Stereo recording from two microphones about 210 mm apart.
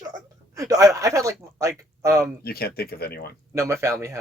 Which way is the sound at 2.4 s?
45° left (ahead or behind).